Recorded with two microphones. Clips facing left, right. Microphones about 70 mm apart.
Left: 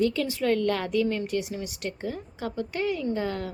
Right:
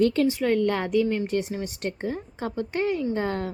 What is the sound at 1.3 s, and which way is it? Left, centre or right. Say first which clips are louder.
A woman's voice: right 3 dB; right.